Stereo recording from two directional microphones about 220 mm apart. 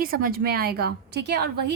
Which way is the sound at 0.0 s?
45° right (ahead or behind).